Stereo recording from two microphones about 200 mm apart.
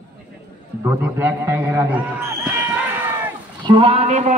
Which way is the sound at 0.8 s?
10° right (ahead or behind).